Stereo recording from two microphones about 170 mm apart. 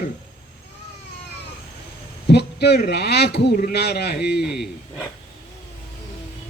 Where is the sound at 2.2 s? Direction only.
75° left (ahead or behind).